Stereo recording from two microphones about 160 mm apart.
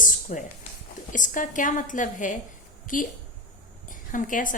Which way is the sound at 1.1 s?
55° left (ahead or behind).